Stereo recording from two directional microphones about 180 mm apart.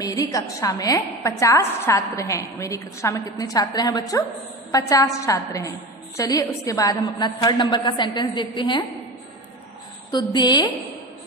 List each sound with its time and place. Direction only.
0.0 s a woman's voice: 20° left (ahead or behind)
10.1 s a woman's voice: 25° left (ahead or behind)